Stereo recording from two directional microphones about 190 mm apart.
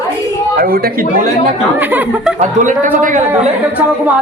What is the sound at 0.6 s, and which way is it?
Speech, 50° right (ahead or behind).